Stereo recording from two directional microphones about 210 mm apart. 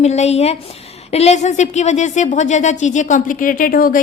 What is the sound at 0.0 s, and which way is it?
Speech, 30° left (ahead or behind).